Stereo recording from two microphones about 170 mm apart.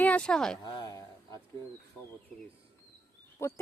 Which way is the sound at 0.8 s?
20° left (ahead or behind).